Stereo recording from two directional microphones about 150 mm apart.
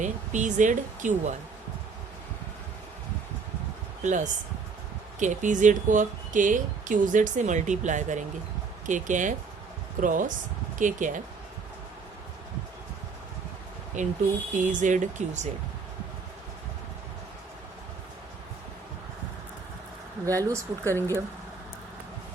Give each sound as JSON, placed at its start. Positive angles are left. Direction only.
{"t": 0.0, "sound": "speech", "side_deg": -55}
{"t": 4.0, "sound": "speech", "side_deg": -55}
{"t": 14.0, "sound": "speech", "side_deg": -55}
{"t": 20.4, "sound": "speech", "side_deg": -20}
{"t": 20.8, "sound": "speech", "side_deg": 15}